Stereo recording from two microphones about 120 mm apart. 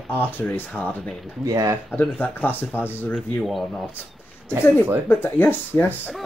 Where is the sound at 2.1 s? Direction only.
15° left (ahead or behind).